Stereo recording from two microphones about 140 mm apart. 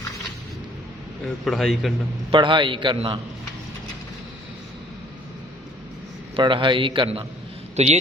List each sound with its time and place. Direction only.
1.5 s a man's voice: centre (ahead or behind)
2.3 s a man's voice: 35° right (ahead or behind)
6.3 s a man's voice: 35° right (ahead or behind)
7.8 s a man's voice: 50° right (ahead or behind)